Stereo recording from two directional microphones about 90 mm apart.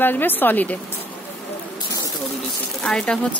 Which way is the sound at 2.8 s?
10° left (ahead or behind).